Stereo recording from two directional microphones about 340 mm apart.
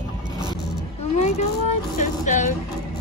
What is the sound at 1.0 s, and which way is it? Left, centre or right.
Speech, centre.